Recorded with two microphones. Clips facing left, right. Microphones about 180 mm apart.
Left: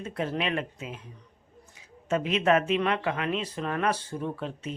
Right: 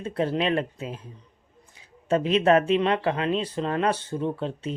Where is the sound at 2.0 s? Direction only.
35° right (ahead or behind).